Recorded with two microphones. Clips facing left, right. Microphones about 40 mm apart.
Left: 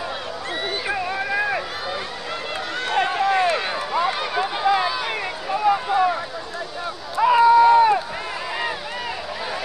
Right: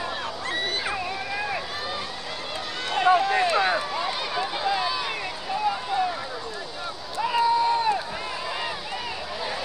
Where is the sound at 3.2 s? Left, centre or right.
Left.